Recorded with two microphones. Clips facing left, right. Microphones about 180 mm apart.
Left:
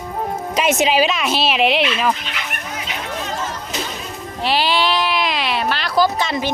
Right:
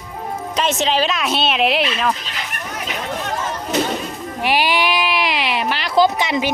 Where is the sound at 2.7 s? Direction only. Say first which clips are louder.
Right 3 dB; 60° right (ahead or behind).